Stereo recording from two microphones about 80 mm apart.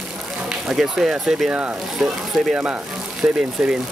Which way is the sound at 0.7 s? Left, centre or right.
Centre.